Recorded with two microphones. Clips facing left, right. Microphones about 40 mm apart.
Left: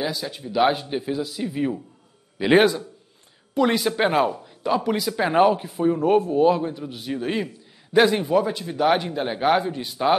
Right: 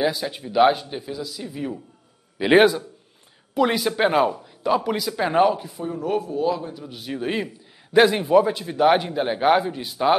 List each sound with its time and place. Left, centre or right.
0.0 s a man's voice: centre
0.8 s a man's voice: centre
2.3 s a man's voice: centre
5.8 s a man's voice: left
6.8 s a man's voice: centre